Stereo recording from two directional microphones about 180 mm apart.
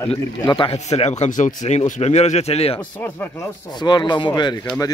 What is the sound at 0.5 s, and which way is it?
A man's voice, 30° left (ahead or behind).